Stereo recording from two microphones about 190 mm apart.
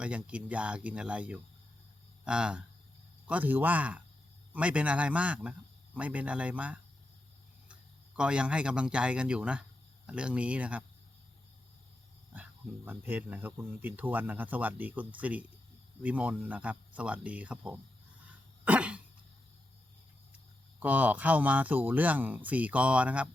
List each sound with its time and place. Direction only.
0.0 s speech: 5° right (ahead or behind)
12.3 s speech: 10° right (ahead or behind)
18.6 s cough: 5° right (ahead or behind)
20.7 s speech: 10° right (ahead or behind)